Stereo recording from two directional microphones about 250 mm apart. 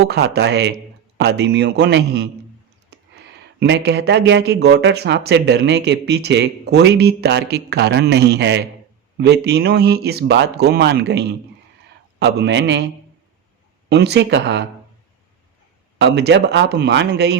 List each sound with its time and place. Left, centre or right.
0.1 s a man's voice: right
13.9 s speech: right
16.0 s a man's voice: right